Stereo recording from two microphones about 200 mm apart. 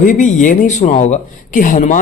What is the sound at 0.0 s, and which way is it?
Speech, 40° left (ahead or behind).